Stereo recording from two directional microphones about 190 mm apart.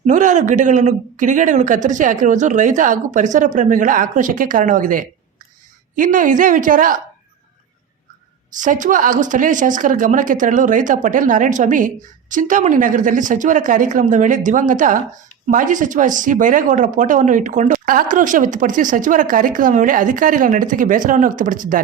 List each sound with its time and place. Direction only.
0.0 s a man's voice: 40° right (ahead or behind)
8.5 s speech: 40° right (ahead or behind)